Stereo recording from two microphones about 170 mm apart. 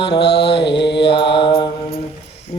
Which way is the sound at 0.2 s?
80° left.